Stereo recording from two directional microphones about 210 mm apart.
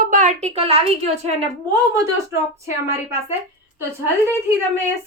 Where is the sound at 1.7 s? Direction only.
15° right (ahead or behind).